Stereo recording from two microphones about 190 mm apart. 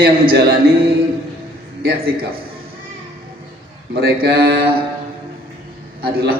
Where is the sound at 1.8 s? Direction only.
50° right (ahead or behind).